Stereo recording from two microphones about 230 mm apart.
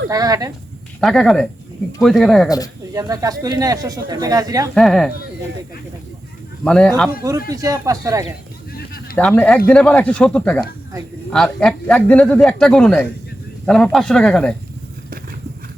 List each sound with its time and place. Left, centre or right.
0.1 s speech: centre
1.0 s a man's voice: centre
2.9 s speech: centre
4.7 s a man's voice: centre
6.7 s a man's voice: centre
7.2 s speech: centre
8.7 s a sound: left
9.1 s a man's voice: centre